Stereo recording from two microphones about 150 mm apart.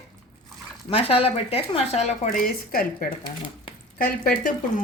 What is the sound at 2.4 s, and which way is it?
Speech, 75° left (ahead or behind).